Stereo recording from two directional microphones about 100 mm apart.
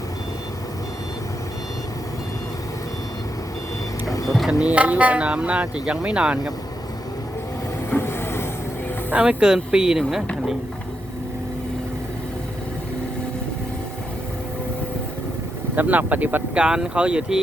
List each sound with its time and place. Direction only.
4.0 s vehicle: 35° left (ahead or behind)
4.3 s vehicle: centre (ahead or behind)
4.6 s speech: 15° right (ahead or behind)
7.9 s vehicle: 25° left (ahead or behind)
9.0 s speech: 10° right (ahead or behind)
15.7 s speech: 20° right (ahead or behind)